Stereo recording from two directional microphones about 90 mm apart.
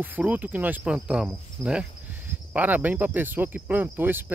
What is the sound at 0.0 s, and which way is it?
Speech, 20° right (ahead or behind).